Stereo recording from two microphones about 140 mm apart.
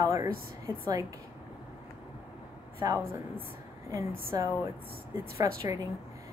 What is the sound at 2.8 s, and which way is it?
Speech, 20° right (ahead or behind).